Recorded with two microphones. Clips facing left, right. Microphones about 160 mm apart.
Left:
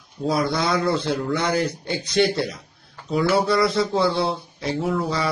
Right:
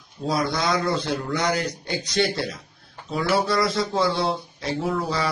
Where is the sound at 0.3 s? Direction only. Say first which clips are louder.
Left 2 dB; 25° left (ahead or behind).